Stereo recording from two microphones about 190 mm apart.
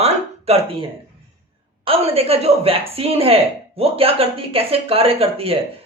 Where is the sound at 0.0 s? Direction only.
30° right (ahead or behind).